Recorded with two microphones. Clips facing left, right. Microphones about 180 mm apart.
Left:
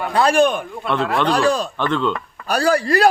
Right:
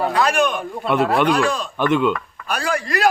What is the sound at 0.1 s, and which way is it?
Speech, 30° left (ahead or behind).